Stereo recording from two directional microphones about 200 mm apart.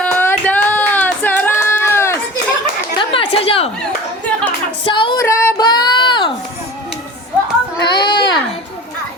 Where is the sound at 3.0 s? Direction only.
25° left (ahead or behind).